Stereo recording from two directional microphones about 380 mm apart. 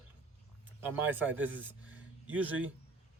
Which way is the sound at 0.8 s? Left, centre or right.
Centre.